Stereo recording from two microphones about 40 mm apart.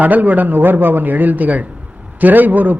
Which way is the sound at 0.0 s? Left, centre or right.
Right.